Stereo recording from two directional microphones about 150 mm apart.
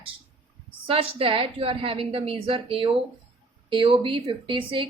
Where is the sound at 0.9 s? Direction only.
35° right (ahead or behind).